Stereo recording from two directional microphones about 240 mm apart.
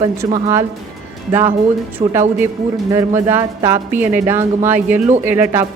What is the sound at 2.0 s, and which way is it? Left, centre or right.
A woman's voice, right.